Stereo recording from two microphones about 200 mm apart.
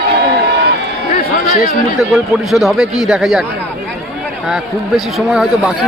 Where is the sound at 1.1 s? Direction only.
45° left (ahead or behind).